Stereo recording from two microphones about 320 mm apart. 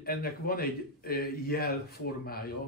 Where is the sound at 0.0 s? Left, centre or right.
Left.